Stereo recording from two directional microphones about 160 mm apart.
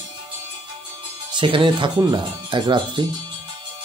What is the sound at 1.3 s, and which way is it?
Speech, 30° right (ahead or behind).